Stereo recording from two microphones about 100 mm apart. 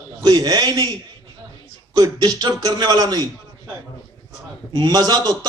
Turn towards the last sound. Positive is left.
turn(degrees=-40)  # may be behind; listen again after turning